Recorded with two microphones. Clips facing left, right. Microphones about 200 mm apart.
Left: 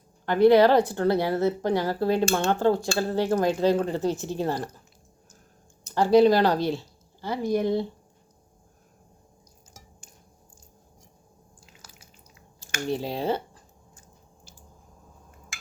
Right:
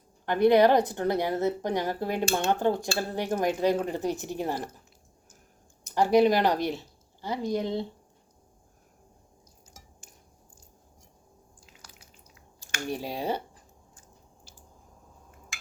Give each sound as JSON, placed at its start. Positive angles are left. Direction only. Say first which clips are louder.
{"t": 0.3, "sound": "a woman's voice", "louder": "left 3 dB", "side_deg": -20}
{"t": 5.9, "sound": "a woman's voice", "louder": "left 3 dB", "side_deg": -15}
{"t": 11.6, "sound": "drip", "louder": "left 1 dB", "side_deg": 0}
{"t": 12.5, "sound": "speech", "louder": "left 4 dB", "side_deg": -15}